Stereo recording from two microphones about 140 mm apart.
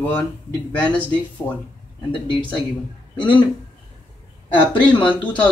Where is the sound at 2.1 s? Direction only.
35° left (ahead or behind).